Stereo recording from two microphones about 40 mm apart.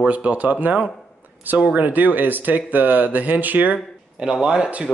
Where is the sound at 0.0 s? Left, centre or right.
Right.